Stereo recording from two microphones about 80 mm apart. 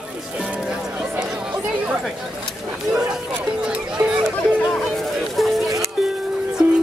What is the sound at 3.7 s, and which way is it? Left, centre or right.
Music, centre.